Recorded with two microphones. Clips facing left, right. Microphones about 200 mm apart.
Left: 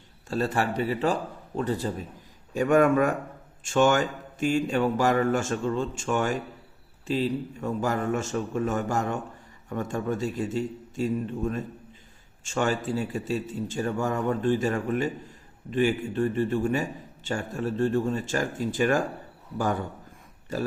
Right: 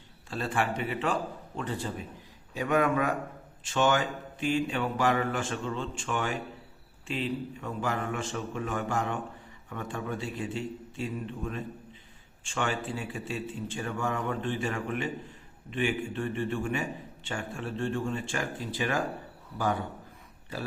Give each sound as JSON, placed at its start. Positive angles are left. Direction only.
{"t": 0.3, "sound": "a man's voice", "side_deg": 40}